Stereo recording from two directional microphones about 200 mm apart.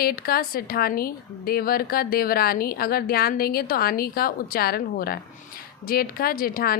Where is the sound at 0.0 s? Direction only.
50° left (ahead or behind).